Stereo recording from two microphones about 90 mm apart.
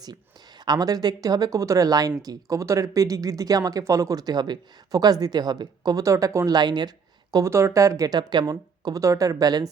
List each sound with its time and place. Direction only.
0.6 s speech: 50° right (ahead or behind)
7.5 s speech: 35° right (ahead or behind)